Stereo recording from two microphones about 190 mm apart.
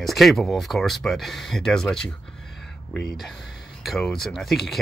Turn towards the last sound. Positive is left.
turn(degrees=0)  # may be behind; listen again after turning